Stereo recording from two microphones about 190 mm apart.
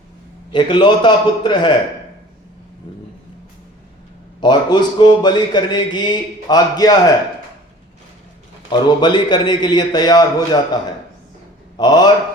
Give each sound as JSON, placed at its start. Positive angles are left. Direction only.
{"t": 0.5, "sound": "speech", "side_deg": 25}
{"t": 4.4, "sound": "speech", "side_deg": 20}
{"t": 8.7, "sound": "speech", "side_deg": 25}
{"t": 11.8, "sound": "speech", "side_deg": 20}